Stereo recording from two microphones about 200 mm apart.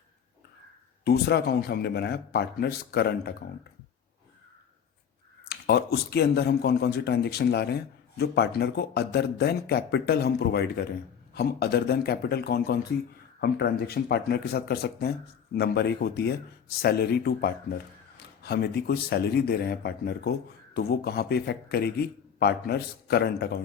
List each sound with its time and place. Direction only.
1.0 s a man's voice: 55° left (ahead or behind)
5.5 s a man's voice: 55° left (ahead or behind)